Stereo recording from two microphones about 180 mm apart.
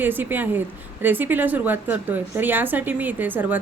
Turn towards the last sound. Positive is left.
turn(degrees=-10)  # may be behind; listen again after turning